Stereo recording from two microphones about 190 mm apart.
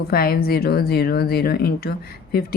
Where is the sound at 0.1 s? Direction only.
50° left (ahead or behind).